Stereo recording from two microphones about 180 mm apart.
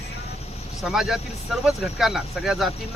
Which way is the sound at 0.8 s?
Centre (ahead or behind).